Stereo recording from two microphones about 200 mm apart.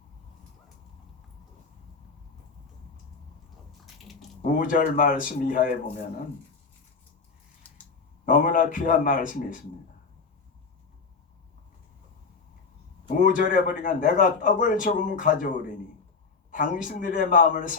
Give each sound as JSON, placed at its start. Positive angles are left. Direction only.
{"t": 3.8, "sound": "a sound", "side_deg": 0}
{"t": 4.7, "sound": "a man's voice", "side_deg": 40}
{"t": 8.2, "sound": "a man's voice", "side_deg": 40}
{"t": 13.1, "sound": "a man's voice", "side_deg": 40}